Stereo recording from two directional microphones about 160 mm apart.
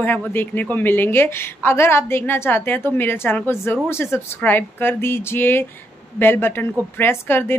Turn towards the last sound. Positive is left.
turn(degrees=15)  # may be behind; listen again after turning